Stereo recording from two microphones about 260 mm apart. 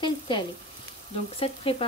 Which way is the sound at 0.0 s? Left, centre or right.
Centre.